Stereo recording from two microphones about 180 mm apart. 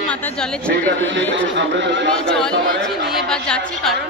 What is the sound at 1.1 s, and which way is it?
Speech, 90° right.